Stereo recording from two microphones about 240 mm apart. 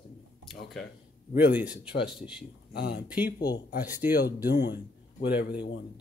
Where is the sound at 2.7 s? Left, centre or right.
Left.